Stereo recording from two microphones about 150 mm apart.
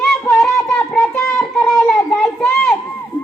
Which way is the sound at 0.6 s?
5° left (ahead or behind).